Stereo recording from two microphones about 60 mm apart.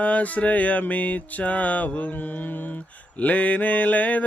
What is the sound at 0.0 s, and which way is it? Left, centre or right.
Mantra, left.